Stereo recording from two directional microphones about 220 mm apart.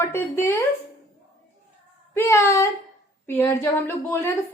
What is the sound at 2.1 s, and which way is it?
A woman's voice, 10° left (ahead or behind).